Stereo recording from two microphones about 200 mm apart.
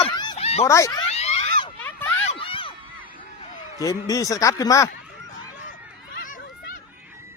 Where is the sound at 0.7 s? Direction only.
15° left (ahead or behind).